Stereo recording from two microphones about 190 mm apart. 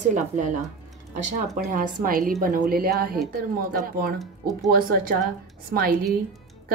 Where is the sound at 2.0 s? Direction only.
50° right (ahead or behind).